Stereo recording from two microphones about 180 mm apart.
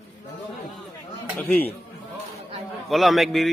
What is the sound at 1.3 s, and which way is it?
Speech, 10° left (ahead or behind).